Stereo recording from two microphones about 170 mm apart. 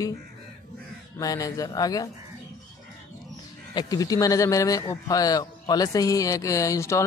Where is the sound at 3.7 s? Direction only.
20° left (ahead or behind).